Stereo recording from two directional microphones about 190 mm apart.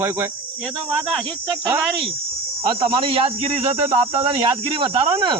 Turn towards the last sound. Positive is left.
turn(degrees=-25)  # may be behind; listen again after turning